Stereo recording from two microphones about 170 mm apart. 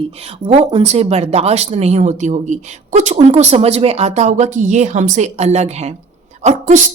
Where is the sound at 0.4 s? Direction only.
35° right (ahead or behind).